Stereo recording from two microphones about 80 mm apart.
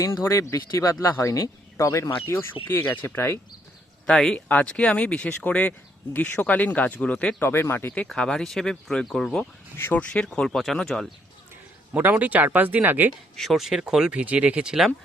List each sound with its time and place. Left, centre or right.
0.0 s speech: left
1.9 s speech: left
4.0 s speech: centre
4.4 s speech: left
7.3 s speech: left
8.0 s speech: centre
9.7 s speech: left; by 11.0 s centre
11.9 s speech: right
13.3 s speech: centre